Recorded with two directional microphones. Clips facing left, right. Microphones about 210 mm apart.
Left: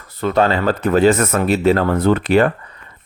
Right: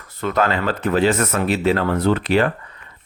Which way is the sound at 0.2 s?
30° left (ahead or behind).